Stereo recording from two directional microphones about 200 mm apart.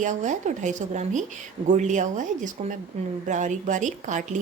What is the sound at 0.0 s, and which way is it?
A woman's voice, 40° right (ahead or behind).